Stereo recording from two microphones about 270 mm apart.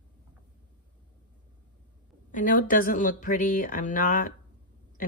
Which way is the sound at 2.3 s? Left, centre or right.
Left.